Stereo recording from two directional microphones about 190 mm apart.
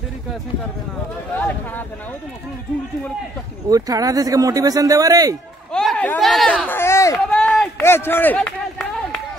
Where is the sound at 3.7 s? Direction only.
20° right (ahead or behind).